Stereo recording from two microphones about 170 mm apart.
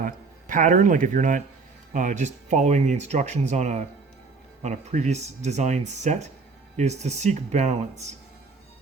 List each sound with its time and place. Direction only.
0.0 s a man's voice: 50° right (ahead or behind)